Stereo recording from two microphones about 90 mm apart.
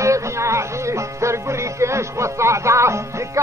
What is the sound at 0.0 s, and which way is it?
Speech, 35° right (ahead or behind).